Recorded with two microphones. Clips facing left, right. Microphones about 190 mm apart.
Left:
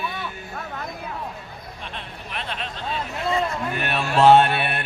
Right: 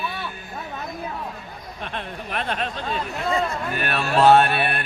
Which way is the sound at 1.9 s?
50° right (ahead or behind).